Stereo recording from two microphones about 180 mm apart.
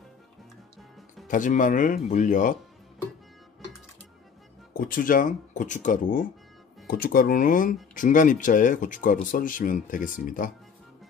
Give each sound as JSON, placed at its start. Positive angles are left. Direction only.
{"t": 1.2, "sound": "speech", "side_deg": 45}
{"t": 4.7, "sound": "speech", "side_deg": 55}